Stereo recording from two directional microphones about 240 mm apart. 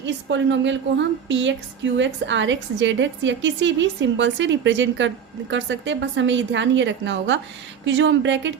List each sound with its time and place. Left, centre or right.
0.0 s a woman's voice: right